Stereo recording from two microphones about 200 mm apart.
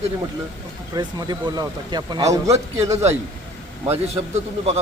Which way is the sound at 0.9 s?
20° right (ahead or behind).